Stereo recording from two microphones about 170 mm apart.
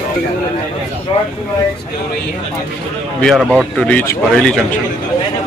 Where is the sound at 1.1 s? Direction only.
35° left (ahead or behind).